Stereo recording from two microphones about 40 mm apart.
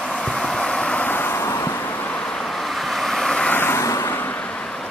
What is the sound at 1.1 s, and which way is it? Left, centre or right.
Vehicle, left.